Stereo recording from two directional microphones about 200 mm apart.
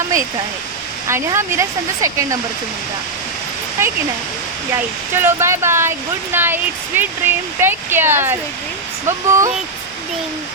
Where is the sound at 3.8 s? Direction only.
10° right (ahead or behind).